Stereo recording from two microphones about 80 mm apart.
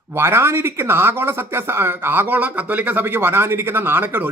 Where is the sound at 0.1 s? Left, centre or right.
Right.